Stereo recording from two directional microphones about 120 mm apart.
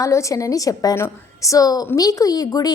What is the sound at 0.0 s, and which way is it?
A woman's voice, 25° left (ahead or behind).